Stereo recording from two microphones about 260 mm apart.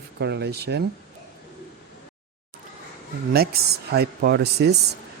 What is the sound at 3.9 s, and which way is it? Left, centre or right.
Speech, right.